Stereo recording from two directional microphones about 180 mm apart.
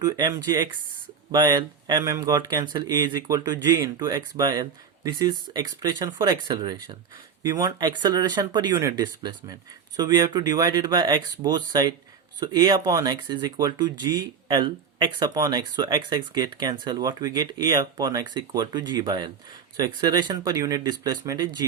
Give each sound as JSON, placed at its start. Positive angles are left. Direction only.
{"t": 0.0, "sound": "speech", "side_deg": -20}